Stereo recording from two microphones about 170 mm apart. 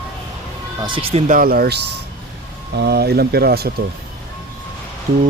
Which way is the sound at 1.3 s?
60° right (ahead or behind).